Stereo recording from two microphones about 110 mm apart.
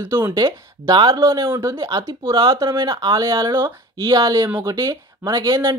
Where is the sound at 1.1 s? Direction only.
30° right (ahead or behind).